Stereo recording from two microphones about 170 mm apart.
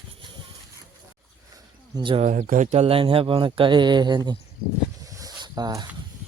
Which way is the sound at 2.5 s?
45° right (ahead or behind).